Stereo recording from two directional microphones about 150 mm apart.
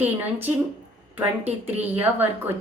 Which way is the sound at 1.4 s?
45° right (ahead or behind).